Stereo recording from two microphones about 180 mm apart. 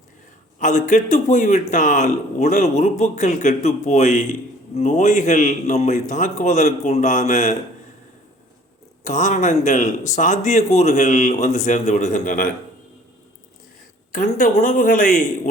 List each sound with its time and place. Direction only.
0.6 s a man's voice: 45° left (ahead or behind)
9.0 s speech: 45° left (ahead or behind)
14.1 s speech: 50° left (ahead or behind)